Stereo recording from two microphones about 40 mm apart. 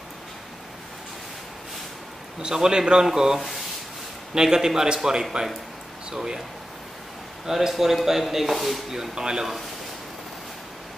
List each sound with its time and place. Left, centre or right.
2.4 s speech: centre
3.3 s speech: centre
4.3 s speech: centre
7.4 s speech: centre
8.9 s speech: centre